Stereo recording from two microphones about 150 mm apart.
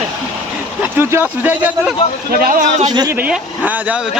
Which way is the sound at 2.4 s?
65° right (ahead or behind).